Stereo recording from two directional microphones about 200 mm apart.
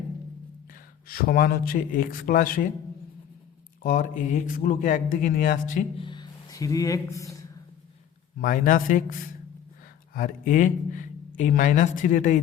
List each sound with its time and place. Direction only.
1.0 s a man's voice: 50° left (ahead or behind)
3.8 s speech: 40° left (ahead or behind)
6.0 s speech: 20° left (ahead or behind)
8.4 s a man's voice: 40° left (ahead or behind)
10.2 s speech: 40° left (ahead or behind)